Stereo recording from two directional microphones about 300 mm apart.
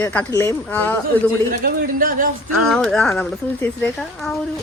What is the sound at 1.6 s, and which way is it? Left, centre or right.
Speech, right.